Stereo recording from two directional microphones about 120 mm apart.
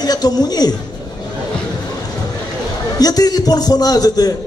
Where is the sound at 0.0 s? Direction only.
35° left (ahead or behind).